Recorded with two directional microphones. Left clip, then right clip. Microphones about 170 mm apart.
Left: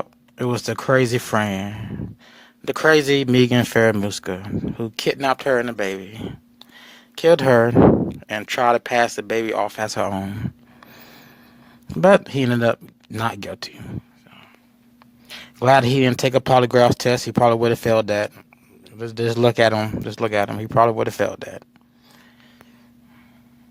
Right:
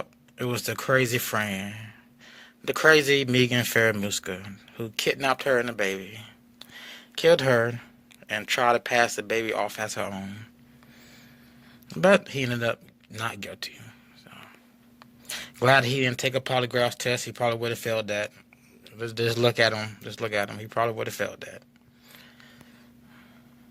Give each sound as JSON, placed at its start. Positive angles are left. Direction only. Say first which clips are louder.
{"t": 0.0, "sound": "speech", "louder": "left 7 dB", "side_deg": 30}
{"t": 6.6, "sound": "a sound", "louder": "right 1 dB", "side_deg": 10}
{"t": 7.2, "sound": "speech", "louder": "left 6 dB", "side_deg": 30}
{"t": 9.6, "sound": "a sound", "louder": "left 8 dB", "side_deg": 30}
{"t": 11.9, "sound": "speech", "louder": "left 6 dB", "side_deg": 30}
{"t": 15.5, "sound": "speech", "louder": "left 6 dB", "side_deg": 25}
{"t": 18.9, "sound": "speech", "louder": "left 4 dB", "side_deg": 25}